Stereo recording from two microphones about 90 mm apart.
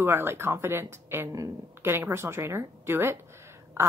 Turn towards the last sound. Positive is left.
turn(degrees=-30)  # may be behind; listen again after turning